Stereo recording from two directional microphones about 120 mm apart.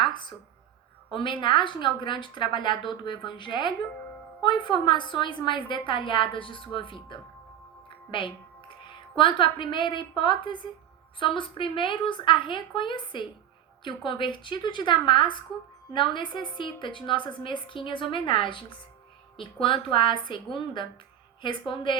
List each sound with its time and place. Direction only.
0.0 s a sound: 40° left (ahead or behind)
1.1 s a woman's voice: 45° left (ahead or behind)
7.9 s music: 45° left (ahead or behind)
9.1 s a woman's voice: 45° left (ahead or behind)